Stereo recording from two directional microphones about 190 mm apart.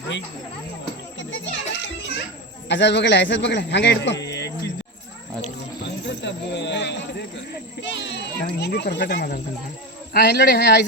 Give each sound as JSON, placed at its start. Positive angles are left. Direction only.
{"t": 1.2, "sound": "children playing", "side_deg": 70}
{"t": 2.6, "sound": "a man's voice", "side_deg": 65}
{"t": 5.8, "sound": "cricket", "side_deg": 65}
{"t": 7.8, "sound": "a man's voice", "side_deg": 70}